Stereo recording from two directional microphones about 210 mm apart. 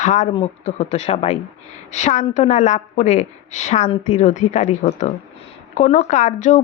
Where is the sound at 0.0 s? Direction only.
35° left (ahead or behind).